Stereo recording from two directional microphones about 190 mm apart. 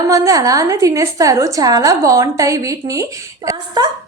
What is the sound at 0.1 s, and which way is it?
A woman's voice, 15° right (ahead or behind).